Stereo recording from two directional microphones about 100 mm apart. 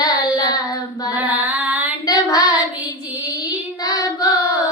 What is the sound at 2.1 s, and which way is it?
Child singing, 40° left (ahead or behind).